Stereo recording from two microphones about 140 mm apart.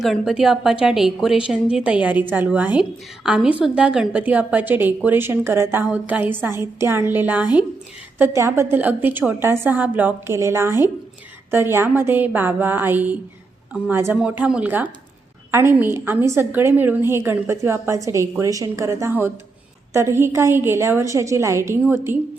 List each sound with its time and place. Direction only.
0.0 s a woman's voice: centre (ahead or behind)